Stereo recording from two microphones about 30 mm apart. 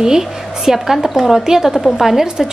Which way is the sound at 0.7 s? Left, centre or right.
Centre.